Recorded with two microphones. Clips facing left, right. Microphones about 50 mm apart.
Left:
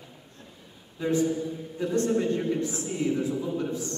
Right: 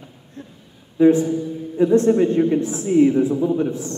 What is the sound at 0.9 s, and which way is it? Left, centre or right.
A man's voice, right.